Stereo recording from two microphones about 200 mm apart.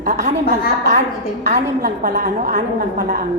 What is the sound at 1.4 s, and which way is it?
A woman's voice, 40° right (ahead or behind).